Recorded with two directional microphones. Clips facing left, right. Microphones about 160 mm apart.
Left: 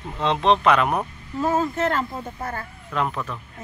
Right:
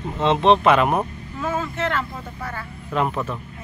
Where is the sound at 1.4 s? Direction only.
40° left (ahead or behind).